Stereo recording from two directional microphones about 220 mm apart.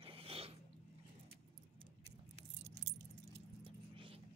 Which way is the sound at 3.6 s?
25° right (ahead or behind).